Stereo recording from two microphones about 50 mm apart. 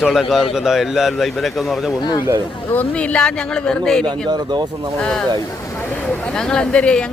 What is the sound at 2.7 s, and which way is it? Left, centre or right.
A man's voice, left.